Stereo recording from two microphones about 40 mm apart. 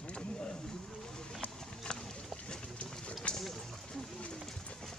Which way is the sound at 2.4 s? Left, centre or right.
Left.